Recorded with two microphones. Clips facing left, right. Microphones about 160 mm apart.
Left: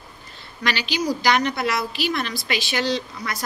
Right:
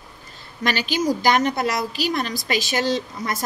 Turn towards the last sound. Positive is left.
turn(degrees=-45)  # may be behind; listen again after turning